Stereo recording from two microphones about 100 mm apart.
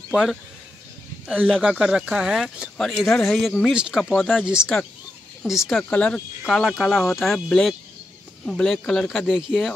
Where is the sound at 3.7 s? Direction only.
10° right (ahead or behind).